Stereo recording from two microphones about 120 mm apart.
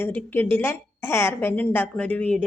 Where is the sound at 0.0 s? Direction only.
15° left (ahead or behind).